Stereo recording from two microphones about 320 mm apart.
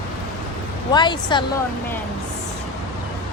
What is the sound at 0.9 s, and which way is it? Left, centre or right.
Speech, centre.